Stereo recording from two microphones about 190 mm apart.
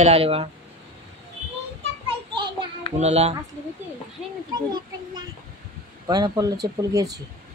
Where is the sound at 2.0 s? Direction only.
25° right (ahead or behind).